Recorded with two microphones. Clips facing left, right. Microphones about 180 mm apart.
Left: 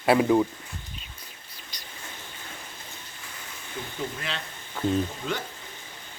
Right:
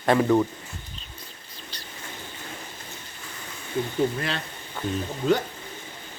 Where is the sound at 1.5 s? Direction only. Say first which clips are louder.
Right 5 dB; 10° left (ahead or behind).